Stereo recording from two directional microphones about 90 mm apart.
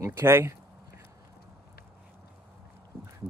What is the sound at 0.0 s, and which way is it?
Speech, 30° right (ahead or behind).